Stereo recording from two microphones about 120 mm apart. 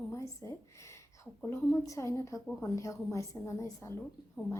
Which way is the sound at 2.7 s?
25° left (ahead or behind).